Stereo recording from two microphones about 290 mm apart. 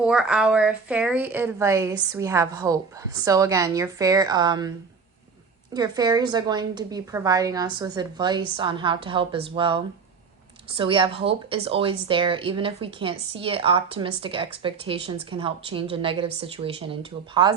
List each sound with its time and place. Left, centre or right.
0.0 s a woman's voice: centre
5.7 s a woman's voice: centre